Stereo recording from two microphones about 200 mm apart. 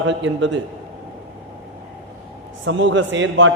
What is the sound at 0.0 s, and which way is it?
Speech, 65° right (ahead or behind).